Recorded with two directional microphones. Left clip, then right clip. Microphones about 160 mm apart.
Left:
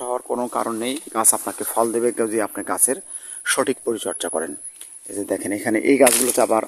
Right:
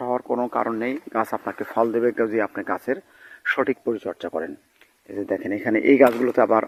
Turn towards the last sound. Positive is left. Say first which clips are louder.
# even
turn(degrees=15)  # may be behind; listen again after turning